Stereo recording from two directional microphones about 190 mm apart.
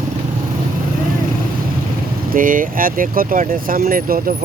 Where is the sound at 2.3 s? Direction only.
45° right (ahead or behind).